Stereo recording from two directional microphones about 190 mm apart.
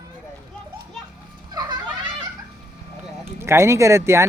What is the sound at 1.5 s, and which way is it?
Children playing, 20° right (ahead or behind).